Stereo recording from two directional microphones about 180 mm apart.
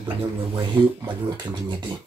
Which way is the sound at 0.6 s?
25° right (ahead or behind).